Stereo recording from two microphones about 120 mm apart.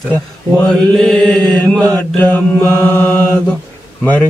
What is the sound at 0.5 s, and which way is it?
Mantra, 5° left (ahead or behind).